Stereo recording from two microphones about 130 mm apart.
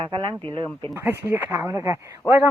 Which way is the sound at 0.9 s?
15° right (ahead or behind).